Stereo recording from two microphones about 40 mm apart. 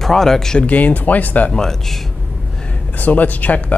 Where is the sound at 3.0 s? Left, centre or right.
Left.